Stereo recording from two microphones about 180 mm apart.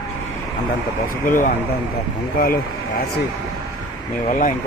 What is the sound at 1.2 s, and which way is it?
Speech, 50° left (ahead or behind).